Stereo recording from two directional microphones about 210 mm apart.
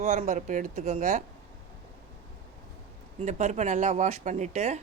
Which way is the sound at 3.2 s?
35° right (ahead or behind).